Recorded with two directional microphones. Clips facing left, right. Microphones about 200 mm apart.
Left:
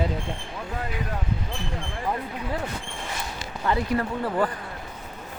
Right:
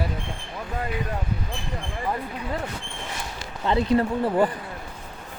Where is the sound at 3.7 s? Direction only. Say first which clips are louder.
Right 4 dB; 25° right (ahead or behind).